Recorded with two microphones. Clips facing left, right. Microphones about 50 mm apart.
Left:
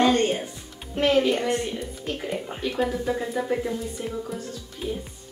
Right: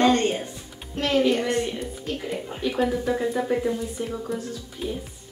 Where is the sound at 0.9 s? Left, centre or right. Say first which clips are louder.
Left 2 dB; centre.